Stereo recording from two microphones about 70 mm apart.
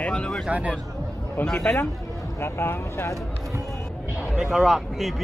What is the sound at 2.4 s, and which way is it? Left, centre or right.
Speech, left.